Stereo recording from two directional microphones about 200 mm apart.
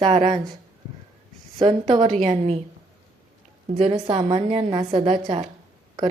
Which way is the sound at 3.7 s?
25° right (ahead or behind).